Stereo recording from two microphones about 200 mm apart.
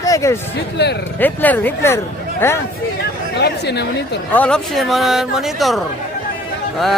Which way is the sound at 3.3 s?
55° left (ahead or behind).